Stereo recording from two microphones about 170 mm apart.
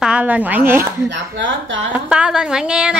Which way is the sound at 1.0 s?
90° right.